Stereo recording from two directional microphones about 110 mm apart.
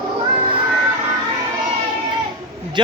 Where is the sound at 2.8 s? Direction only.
45° right (ahead or behind).